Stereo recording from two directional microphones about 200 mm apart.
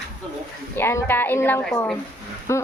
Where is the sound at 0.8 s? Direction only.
10° left (ahead or behind).